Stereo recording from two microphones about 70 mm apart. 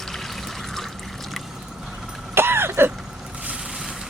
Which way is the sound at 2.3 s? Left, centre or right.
Right.